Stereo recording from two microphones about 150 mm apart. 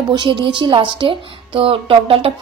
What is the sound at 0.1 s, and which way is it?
A woman's voice, 30° right (ahead or behind).